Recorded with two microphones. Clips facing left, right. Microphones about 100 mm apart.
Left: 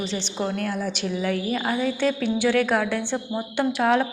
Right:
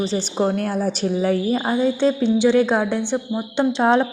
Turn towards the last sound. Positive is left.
turn(degrees=-25)  # may be behind; listen again after turning